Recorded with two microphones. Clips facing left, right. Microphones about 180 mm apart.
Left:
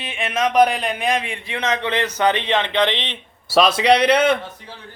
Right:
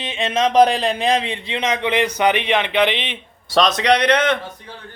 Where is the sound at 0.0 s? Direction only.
25° right (ahead or behind).